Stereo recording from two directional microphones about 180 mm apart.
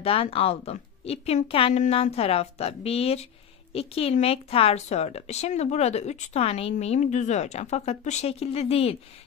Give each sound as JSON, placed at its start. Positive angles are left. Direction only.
{"t": 0.0, "sound": "a woman's voice", "side_deg": 30}